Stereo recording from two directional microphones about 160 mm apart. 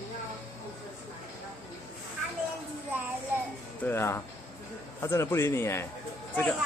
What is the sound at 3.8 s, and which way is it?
Speech, 15° left (ahead or behind).